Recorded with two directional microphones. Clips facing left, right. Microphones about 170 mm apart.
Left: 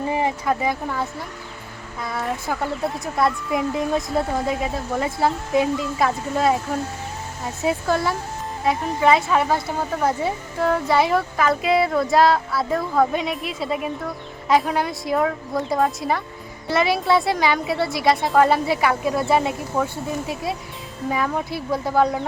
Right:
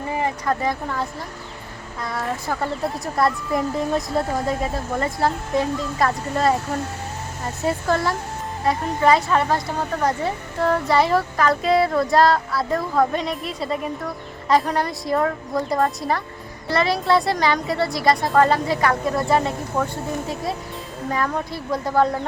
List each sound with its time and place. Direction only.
0.1 s a sound: 15° left (ahead or behind)
0.6 s a woman's voice: 5° left (ahead or behind)
21.1 s a woman's voice: 5° left (ahead or behind)